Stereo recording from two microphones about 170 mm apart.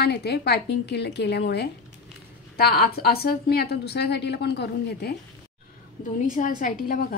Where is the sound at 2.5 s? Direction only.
65° left (ahead or behind).